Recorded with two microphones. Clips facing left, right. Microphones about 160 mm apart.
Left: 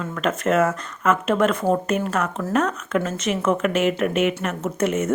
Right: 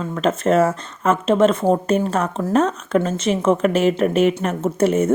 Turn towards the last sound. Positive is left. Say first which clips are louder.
# right 5 dB
turn(degrees=-30)  # may be behind; listen again after turning